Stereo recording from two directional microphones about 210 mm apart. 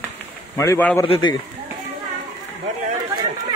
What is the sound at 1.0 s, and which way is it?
Speech, 25° left (ahead or behind).